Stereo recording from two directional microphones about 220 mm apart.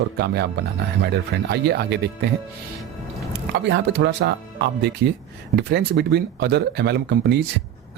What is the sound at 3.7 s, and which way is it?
Speech, 50° right (ahead or behind).